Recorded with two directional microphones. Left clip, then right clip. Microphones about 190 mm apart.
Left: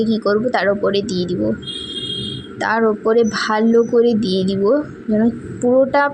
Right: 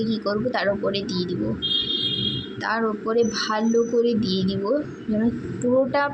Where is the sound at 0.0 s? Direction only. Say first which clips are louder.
Left 8 dB; 35° left (ahead or behind).